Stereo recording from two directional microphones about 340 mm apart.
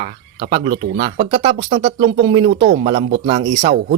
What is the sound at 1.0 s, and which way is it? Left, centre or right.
Speech, centre.